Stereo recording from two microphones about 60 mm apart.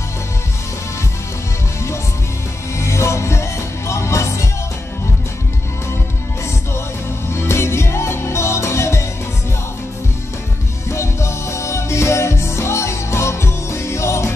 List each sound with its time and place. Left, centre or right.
2.8 s music: left
7.3 s music: left
10.9 s music: left